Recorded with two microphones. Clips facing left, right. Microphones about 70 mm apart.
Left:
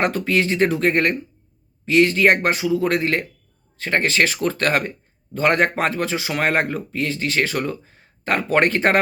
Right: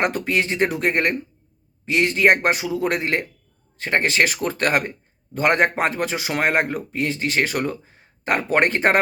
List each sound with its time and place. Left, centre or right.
0.0 s speech: right